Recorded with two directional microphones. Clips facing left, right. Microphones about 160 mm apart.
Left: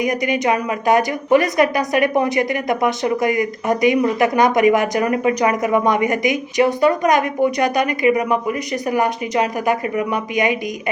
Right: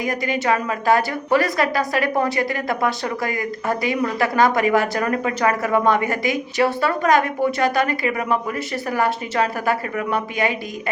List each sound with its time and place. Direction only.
0.0 s a woman's voice: 20° left (ahead or behind)